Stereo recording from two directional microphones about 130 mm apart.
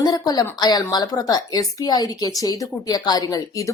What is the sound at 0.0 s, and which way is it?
A woman's voice, 30° left (ahead or behind).